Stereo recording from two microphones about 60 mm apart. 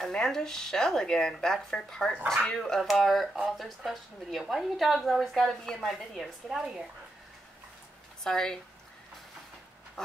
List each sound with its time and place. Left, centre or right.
0.0 s speech: centre
2.8 s a woman's voice: centre
8.2 s speech: centre
10.0 s duck: centre